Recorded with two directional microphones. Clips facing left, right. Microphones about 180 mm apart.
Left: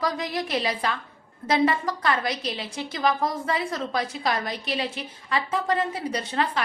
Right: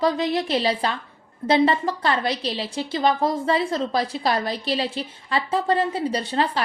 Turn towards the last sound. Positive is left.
turn(degrees=-30)  # may be behind; listen again after turning